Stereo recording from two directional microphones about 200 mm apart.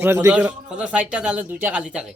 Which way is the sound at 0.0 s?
10° right (ahead or behind).